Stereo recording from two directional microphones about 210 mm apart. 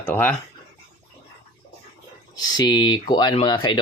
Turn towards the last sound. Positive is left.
turn(degrees=20)  # may be behind; listen again after turning